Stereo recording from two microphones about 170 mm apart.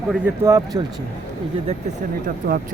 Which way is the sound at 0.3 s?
20° right (ahead or behind).